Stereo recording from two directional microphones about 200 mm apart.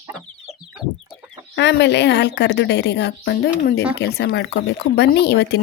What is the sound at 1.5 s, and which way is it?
A woman's voice, 60° left (ahead or behind).